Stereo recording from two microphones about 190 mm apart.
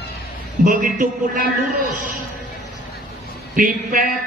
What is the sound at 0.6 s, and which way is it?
Speech, 45° right (ahead or behind).